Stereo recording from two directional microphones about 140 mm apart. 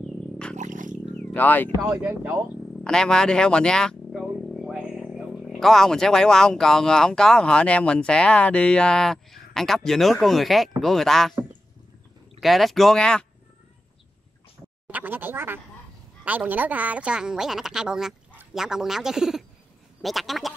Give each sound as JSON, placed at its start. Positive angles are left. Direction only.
{"t": 0.0, "sound": "a sound", "side_deg": 5}
{"t": 0.6, "sound": "a sound", "side_deg": -65}
{"t": 1.1, "sound": "wild animals", "side_deg": 10}
{"t": 1.9, "sound": "a woman's voice", "side_deg": -10}
{"t": 2.8, "sound": "speech", "side_deg": 5}
{"t": 12.4, "sound": "speech", "side_deg": 0}
{"t": 14.9, "sound": "a woman's voice", "side_deg": -10}